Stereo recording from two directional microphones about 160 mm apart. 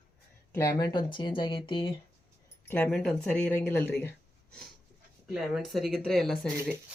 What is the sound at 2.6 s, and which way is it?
Speech, 10° left (ahead or behind).